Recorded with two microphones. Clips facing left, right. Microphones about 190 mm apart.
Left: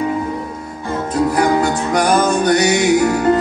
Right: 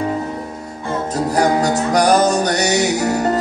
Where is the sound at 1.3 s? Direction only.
40° right (ahead or behind).